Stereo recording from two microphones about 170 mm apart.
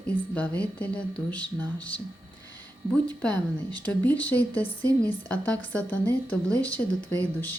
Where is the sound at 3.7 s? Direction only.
10° left (ahead or behind).